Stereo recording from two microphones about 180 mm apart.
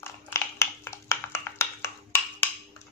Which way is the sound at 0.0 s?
15° left (ahead or behind).